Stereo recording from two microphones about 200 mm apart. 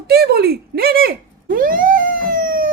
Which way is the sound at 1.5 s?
45° right (ahead or behind).